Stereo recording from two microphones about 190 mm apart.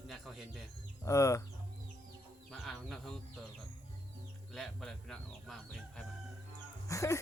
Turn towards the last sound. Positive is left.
turn(degrees=15)  # may be behind; listen again after turning